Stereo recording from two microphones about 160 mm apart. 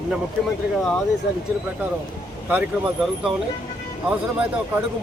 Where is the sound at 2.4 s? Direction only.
10° right (ahead or behind).